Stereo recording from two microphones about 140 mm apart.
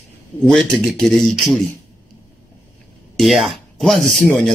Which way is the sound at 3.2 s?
Centre (ahead or behind).